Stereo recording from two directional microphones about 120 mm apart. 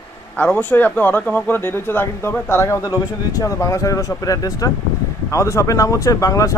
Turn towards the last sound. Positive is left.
turn(degrees=25)  # may be behind; listen again after turning